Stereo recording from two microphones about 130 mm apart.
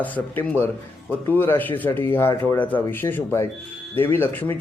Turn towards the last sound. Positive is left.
turn(degrees=15)  # may be behind; listen again after turning